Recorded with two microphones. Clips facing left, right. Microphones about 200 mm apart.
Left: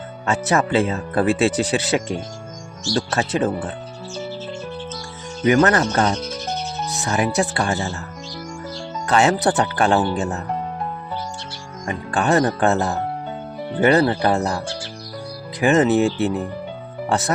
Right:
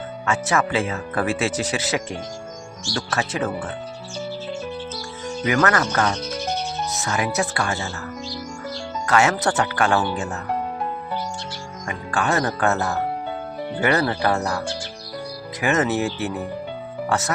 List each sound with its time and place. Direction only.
0.3 s speech: 35° left (ahead or behind)
5.5 s speech: 30° left (ahead or behind)
9.0 s speech: 30° left (ahead or behind)
11.9 s speech: 35° left (ahead or behind)
15.6 s speech: 30° left (ahead or behind)